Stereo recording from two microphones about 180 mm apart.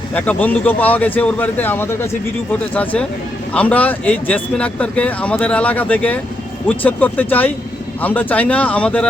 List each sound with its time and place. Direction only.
0.1 s speech: 10° left (ahead or behind)